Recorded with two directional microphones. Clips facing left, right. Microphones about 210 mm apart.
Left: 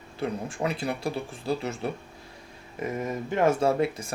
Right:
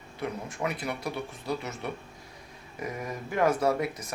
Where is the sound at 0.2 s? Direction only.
30° left (ahead or behind).